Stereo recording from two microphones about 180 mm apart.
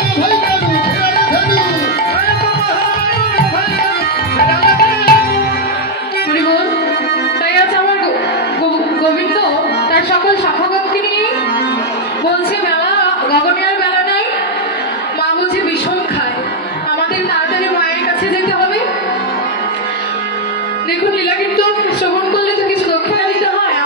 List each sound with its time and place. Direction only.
1.0 s music: 60° left (ahead or behind)
4.6 s music: 60° left (ahead or behind)